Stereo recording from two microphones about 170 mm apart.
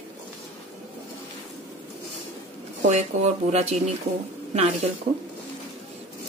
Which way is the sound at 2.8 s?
45° right (ahead or behind).